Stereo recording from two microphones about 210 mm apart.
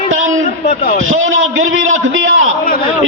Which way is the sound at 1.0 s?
70° right (ahead or behind).